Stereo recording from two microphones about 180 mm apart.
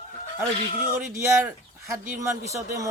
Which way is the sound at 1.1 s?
15° right (ahead or behind).